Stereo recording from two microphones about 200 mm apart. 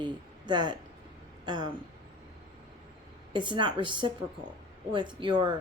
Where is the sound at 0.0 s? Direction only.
20° right (ahead or behind).